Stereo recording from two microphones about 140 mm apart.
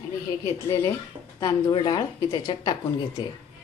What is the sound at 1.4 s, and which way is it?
Speech, 30° left (ahead or behind).